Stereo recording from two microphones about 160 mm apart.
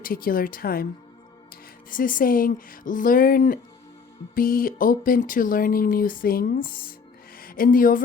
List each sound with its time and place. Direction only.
0.0 s speech: 65° left (ahead or behind)
1.9 s speech: 60° left (ahead or behind)